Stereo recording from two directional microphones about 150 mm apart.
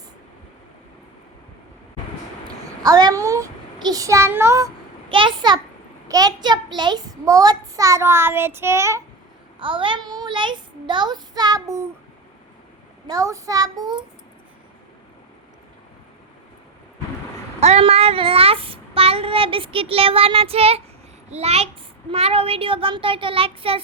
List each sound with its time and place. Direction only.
2.8 s a child's voice: 25° right (ahead or behind)
5.0 s a child's voice: 35° right (ahead or behind); by 9.0 s 20° right (ahead or behind)
9.6 s a child's voice: 35° right (ahead or behind)
13.1 s a child's voice: 25° right (ahead or behind)
17.6 s child singing: 45° right (ahead or behind)
21.2 s a child's voice: 45° right (ahead or behind)